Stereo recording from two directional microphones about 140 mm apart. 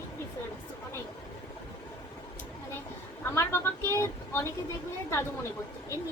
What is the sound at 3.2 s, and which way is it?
A woman's voice, 20° left (ahead or behind).